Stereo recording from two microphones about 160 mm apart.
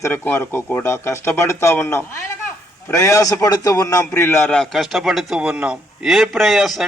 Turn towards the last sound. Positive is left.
turn(degrees=0)  # may be behind; listen again after turning